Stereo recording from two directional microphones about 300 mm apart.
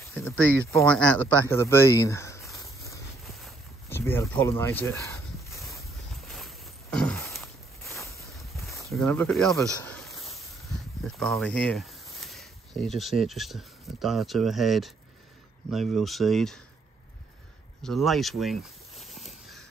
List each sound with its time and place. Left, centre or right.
0.1 s speech: centre
3.3 s a sound: centre
10.3 s speech: centre
17.8 s speech: centre